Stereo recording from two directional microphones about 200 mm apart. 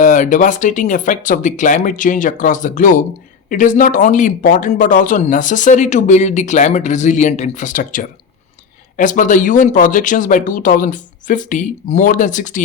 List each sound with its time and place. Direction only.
0.0 s speech: 40° left (ahead or behind)